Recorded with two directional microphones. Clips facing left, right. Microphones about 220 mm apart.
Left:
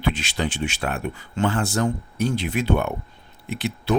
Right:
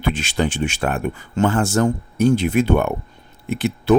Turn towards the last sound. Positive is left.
turn(degrees=-50)  # may be behind; listen again after turning